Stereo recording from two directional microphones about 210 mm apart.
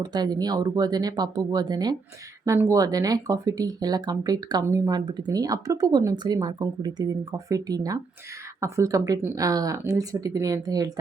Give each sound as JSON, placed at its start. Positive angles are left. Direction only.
{"t": 0.0, "sound": "speech", "side_deg": -20}